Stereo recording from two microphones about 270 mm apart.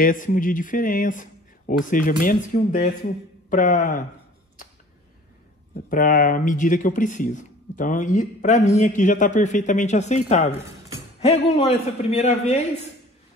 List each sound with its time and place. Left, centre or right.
0.0 s speech: left
5.9 s speech: left